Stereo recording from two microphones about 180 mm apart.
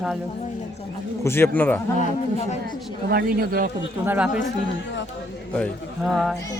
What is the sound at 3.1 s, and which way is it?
Speech, 55° right (ahead or behind).